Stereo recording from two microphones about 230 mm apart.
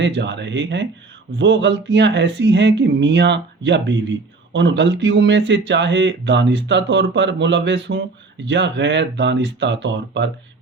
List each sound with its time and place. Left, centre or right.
0.0 s speech: right